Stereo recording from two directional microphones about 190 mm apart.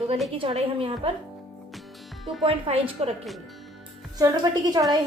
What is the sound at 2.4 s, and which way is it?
Speech, 30° right (ahead or behind).